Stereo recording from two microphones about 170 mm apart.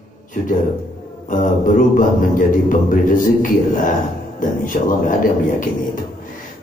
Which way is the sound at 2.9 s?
50° left (ahead or behind).